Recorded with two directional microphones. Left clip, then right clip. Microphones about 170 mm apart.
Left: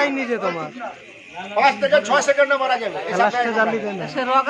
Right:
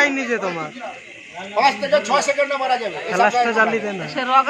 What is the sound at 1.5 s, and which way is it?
A man's voice, 5° left (ahead or behind).